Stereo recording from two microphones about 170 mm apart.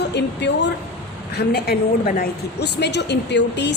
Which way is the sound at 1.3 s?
70° left (ahead or behind).